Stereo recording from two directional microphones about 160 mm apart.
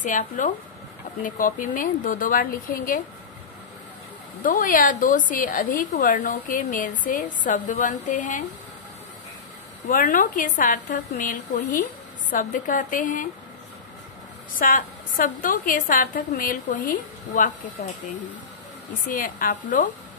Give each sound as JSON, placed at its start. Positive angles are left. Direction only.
{"t": 0.0, "sound": "a woman's voice", "side_deg": 55}
{"t": 4.4, "sound": "a woman's voice", "side_deg": 55}
{"t": 9.8, "sound": "a woman's voice", "side_deg": 60}
{"t": 14.6, "sound": "a woman's voice", "side_deg": 60}
{"t": 19.0, "sound": "a woman's voice", "side_deg": 60}